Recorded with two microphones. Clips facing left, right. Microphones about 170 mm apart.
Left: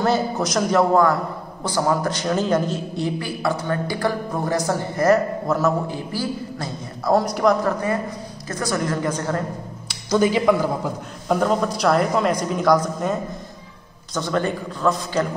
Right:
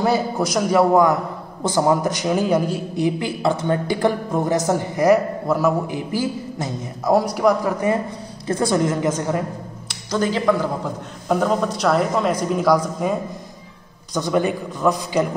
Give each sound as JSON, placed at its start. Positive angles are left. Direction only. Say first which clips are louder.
{"t": 0.0, "sound": "speech", "louder": "right 1 dB", "side_deg": -10}
{"t": 3.2, "sound": "speech", "louder": "right 3 dB", "side_deg": -20}
{"t": 8.5, "sound": "a woman's voice", "louder": "right 5 dB", "side_deg": -25}
{"t": 9.8, "sound": "a sound", "louder": "left 3 dB", "side_deg": 10}
{"t": 11.2, "sound": "a woman's voice", "louder": "even", "side_deg": 0}